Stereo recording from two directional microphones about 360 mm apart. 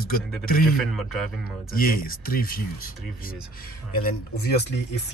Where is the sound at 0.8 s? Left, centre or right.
Centre.